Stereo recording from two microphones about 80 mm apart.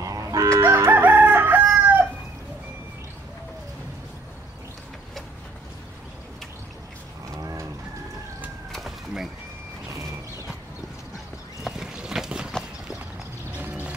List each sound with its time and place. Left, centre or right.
0.0 s fowl: right
0.6 s crowing: right
7.2 s livestock: right
8.7 s a sound: centre
11.6 s a sound: centre
13.6 s horse: right